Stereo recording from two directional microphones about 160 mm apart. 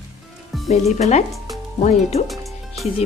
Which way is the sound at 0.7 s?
45° left (ahead or behind).